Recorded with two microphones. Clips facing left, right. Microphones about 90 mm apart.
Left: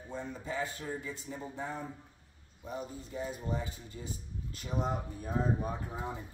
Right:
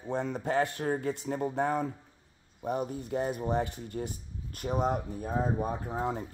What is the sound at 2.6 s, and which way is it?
Speech, 60° right (ahead or behind).